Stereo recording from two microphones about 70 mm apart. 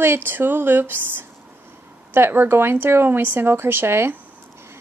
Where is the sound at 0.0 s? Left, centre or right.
Right.